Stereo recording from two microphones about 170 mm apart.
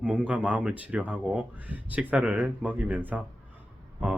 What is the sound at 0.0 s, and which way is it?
Speech, 5° right (ahead or behind).